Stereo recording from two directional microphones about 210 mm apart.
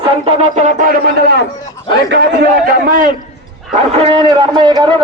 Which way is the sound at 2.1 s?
55° right (ahead or behind).